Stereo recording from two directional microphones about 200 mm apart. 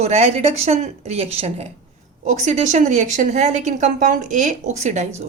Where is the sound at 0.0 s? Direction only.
35° right (ahead or behind).